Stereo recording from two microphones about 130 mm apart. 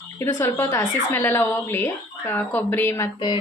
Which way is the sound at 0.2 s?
20° left (ahead or behind).